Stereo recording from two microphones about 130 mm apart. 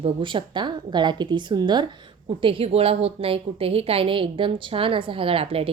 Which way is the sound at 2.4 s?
45° right (ahead or behind).